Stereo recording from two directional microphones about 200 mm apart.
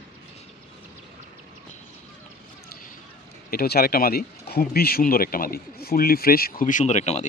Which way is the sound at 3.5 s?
50° left (ahead or behind).